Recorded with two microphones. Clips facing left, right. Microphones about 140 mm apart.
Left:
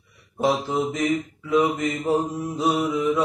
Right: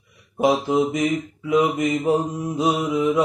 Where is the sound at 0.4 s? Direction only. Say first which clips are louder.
Right 4 dB; 15° right (ahead or behind).